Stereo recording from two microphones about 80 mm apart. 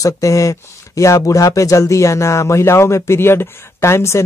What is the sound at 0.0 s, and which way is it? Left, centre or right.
Speech, left.